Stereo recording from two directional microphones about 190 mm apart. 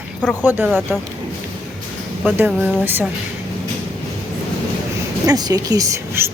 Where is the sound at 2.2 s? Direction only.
10° right (ahead or behind).